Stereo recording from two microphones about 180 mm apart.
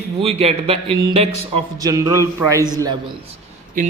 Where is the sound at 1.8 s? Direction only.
20° right (ahead or behind).